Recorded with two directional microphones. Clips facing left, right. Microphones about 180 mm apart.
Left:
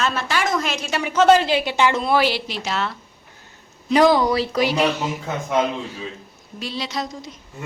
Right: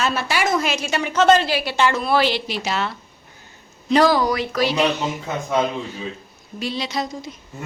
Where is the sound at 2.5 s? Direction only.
5° right (ahead or behind).